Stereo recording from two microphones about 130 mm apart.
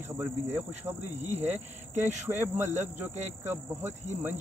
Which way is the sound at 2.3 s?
15° right (ahead or behind).